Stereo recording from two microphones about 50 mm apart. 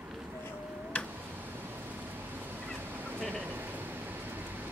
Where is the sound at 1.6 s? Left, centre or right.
Right.